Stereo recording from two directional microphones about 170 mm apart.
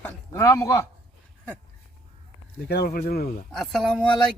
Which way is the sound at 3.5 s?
Centre (ahead or behind).